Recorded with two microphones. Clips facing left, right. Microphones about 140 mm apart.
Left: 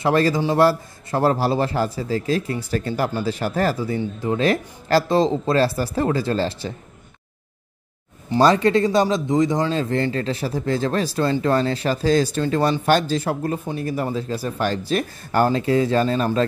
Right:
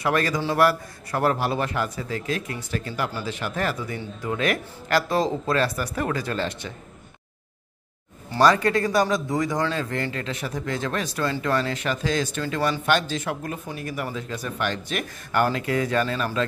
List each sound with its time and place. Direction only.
0.0 s a man's voice: 30° left (ahead or behind)
8.3 s a man's voice: 25° left (ahead or behind)